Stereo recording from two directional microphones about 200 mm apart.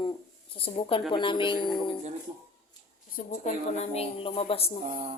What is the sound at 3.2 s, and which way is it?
A woman's voice, 40° left (ahead or behind).